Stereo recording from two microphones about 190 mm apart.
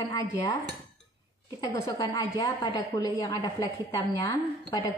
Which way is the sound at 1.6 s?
20° left (ahead or behind).